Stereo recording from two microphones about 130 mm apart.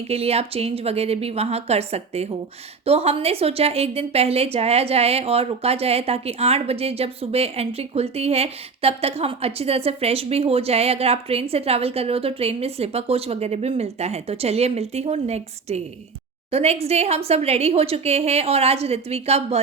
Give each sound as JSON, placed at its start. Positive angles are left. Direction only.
{"t": 0.1, "sound": "a woman's voice", "side_deg": -50}